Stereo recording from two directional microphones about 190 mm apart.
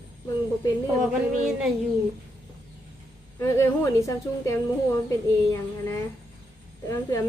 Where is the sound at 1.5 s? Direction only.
Centre (ahead or behind).